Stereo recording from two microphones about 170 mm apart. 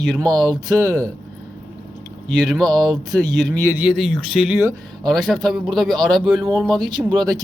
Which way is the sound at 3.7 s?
10° right (ahead or behind).